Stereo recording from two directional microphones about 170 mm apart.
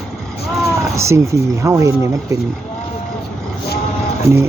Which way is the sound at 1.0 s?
15° right (ahead or behind).